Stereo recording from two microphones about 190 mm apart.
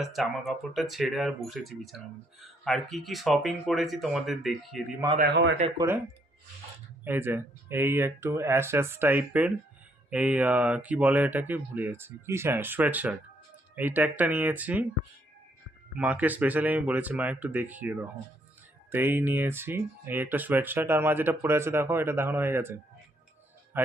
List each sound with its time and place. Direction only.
0.0 s speech: centre (ahead or behind)
5.2 s a man's voice: 70° right (ahead or behind)
5.5 s speech: 30° right (ahead or behind)
7.0 s speech: 10° right (ahead or behind)
16.0 s speech: 10° right (ahead or behind)